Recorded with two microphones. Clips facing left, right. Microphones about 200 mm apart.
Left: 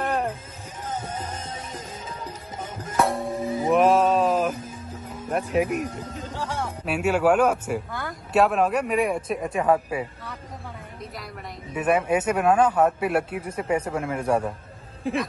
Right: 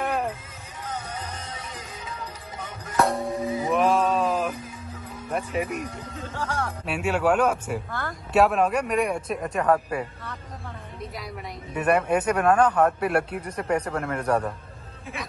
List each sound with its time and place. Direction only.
0.8 s music: 20° left (ahead or behind)
2.6 s music: 25° left (ahead or behind)
3.0 s music: centre (ahead or behind)
3.7 s a sound: centre (ahead or behind)
5.3 s speech: centre (ahead or behind)
5.9 s speech: 20° left (ahead or behind)
6.9 s speech: 5° left (ahead or behind)
11.7 s speech: centre (ahead or behind)